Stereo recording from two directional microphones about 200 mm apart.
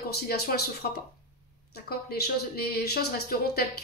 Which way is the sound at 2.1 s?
50° left (ahead or behind).